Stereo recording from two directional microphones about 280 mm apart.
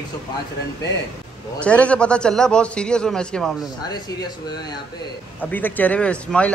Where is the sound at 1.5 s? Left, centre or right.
Centre.